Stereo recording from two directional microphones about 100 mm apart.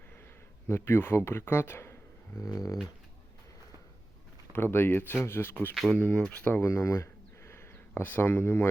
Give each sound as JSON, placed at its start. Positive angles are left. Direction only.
{"t": 0.7, "sound": "a man's voice", "side_deg": 25}
{"t": 2.4, "sound": "dog", "side_deg": 35}
{"t": 4.5, "sound": "a man's voice", "side_deg": 20}
{"t": 5.7, "sound": "speech", "side_deg": 0}